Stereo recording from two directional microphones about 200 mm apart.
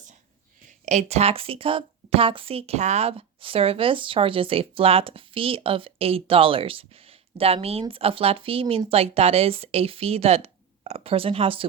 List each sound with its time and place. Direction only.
0.9 s a woman's voice: 35° right (ahead or behind)